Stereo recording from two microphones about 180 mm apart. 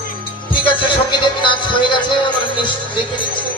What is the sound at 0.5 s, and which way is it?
Speech, 30° left (ahead or behind).